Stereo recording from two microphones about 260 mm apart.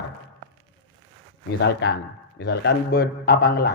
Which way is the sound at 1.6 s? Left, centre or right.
Left.